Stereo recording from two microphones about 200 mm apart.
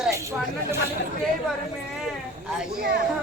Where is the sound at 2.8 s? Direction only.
50° right (ahead or behind).